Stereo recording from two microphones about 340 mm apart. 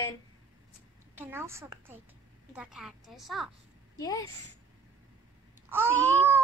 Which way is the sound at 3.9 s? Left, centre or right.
Centre.